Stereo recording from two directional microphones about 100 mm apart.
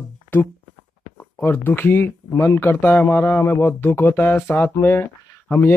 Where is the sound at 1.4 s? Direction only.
20° left (ahead or behind).